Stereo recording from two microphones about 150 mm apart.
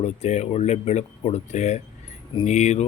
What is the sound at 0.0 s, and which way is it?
Speech, 45° left (ahead or behind).